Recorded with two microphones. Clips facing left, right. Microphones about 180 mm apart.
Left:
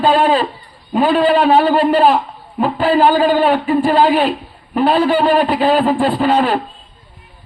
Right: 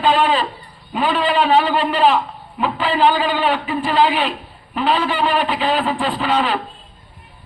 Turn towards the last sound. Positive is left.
turn(degrees=45)  # may be behind; listen again after turning